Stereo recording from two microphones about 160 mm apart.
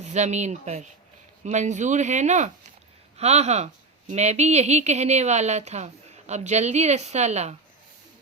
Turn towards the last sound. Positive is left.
turn(degrees=-45)  # may be behind; listen again after turning